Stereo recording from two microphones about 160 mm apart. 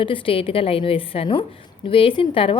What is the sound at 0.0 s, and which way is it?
A woman's voice, 35° left (ahead or behind).